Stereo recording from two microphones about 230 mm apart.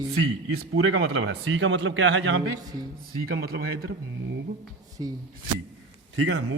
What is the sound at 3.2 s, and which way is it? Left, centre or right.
Speech, right.